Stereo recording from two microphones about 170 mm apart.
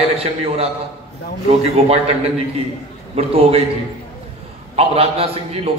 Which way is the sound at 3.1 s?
35° right (ahead or behind).